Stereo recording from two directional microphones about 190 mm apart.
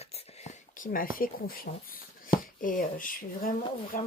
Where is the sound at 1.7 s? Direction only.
45° left (ahead or behind).